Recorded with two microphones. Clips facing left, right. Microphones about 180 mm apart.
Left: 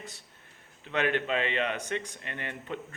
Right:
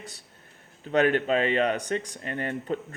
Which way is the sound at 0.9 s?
40° right (ahead or behind).